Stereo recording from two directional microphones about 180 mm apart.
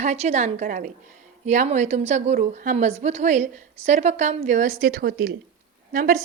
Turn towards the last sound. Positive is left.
turn(degrees=-50)  # may be behind; listen again after turning